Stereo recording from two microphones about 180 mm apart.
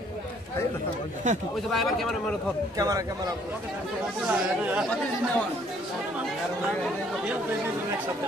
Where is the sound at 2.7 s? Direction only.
20° right (ahead or behind).